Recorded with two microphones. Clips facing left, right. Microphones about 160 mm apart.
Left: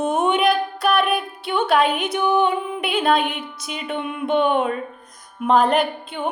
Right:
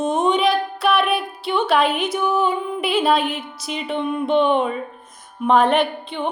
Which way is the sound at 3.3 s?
50° left (ahead or behind).